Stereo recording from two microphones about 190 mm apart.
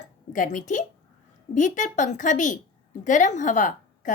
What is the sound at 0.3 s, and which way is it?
A woman's voice, 45° left (ahead or behind).